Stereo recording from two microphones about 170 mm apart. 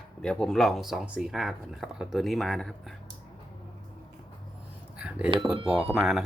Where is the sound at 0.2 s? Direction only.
5° left (ahead or behind).